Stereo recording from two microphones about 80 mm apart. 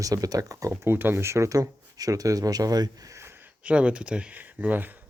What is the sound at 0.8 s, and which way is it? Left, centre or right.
Speech, right.